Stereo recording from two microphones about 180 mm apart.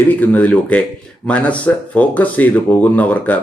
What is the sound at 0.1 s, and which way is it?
Speech, 10° left (ahead or behind).